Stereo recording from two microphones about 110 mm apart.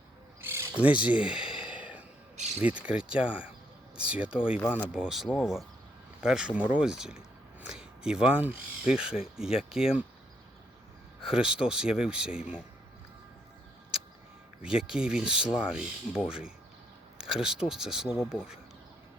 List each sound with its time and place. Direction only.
0.4 s a sound: 25° right (ahead or behind)
0.8 s speech: 10° right (ahead or behind)
2.6 s speech: 10° right (ahead or behind)
11.2 s speech: 5° right (ahead or behind)
14.6 s speech: 5° right (ahead or behind)